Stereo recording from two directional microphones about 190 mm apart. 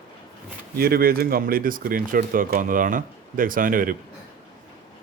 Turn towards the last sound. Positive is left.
turn(degrees=-45)  # may be behind; listen again after turning